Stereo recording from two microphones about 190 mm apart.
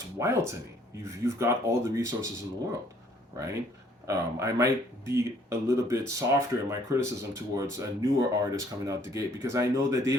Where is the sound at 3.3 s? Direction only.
15° right (ahead or behind).